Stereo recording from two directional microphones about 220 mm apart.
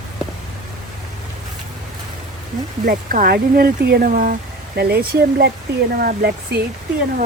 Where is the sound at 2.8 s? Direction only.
40° right (ahead or behind).